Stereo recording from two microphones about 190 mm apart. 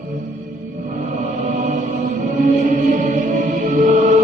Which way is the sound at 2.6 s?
40° right (ahead or behind).